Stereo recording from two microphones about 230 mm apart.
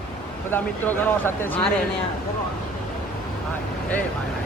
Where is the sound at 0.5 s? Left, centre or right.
Centre.